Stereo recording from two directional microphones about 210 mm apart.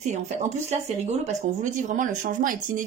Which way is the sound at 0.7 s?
30° right (ahead or behind).